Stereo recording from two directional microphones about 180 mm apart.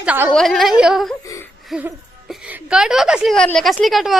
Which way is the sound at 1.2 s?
15° left (ahead or behind).